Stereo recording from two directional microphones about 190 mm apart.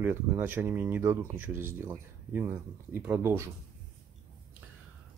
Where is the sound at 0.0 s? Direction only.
10° right (ahead or behind).